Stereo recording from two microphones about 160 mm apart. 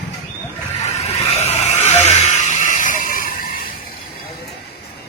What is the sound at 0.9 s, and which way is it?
Vehicle, 45° left (ahead or behind).